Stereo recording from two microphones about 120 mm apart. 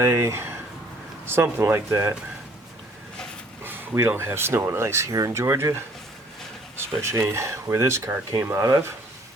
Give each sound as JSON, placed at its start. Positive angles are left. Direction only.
{"t": 0.0, "sound": "speech", "side_deg": -25}
{"t": 3.6, "sound": "speech", "side_deg": -20}
{"t": 7.0, "sound": "speech", "side_deg": -20}